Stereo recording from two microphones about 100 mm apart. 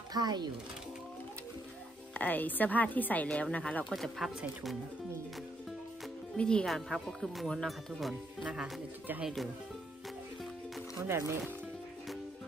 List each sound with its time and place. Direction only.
0.1 s speech: 45° right (ahead or behind)
2.1 s a woman's voice: 15° left (ahead or behind)
3.9 s speech: centre (ahead or behind)
6.3 s speech: 10° left (ahead or behind)
11.1 s speech: 25° right (ahead or behind)